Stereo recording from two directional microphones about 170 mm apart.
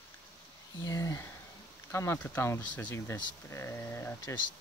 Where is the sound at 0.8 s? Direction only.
20° left (ahead or behind).